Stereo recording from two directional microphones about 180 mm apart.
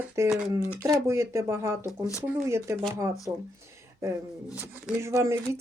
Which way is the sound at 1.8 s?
15° left (ahead or behind).